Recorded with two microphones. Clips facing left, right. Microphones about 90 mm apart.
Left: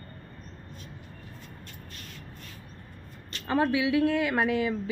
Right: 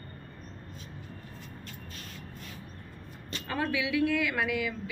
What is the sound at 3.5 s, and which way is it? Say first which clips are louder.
Speech: left 6 dB; 25° left (ahead or behind).